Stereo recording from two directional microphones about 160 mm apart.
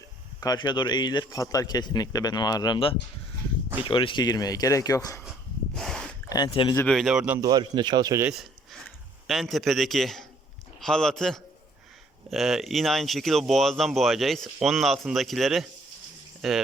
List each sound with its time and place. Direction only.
0.3 s speech: 25° left (ahead or behind)
5.7 s a sound: centre (ahead or behind)
6.2 s a sound: 25° left (ahead or behind)
6.5 s speech: 30° left (ahead or behind)
6.8 s speech: centre (ahead or behind)
7.4 s speech: 25° right (ahead or behind)
8.2 s speech: 5° right (ahead or behind)